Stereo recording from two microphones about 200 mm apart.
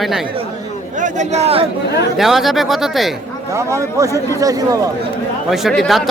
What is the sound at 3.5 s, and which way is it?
A man's voice, 15° right (ahead or behind).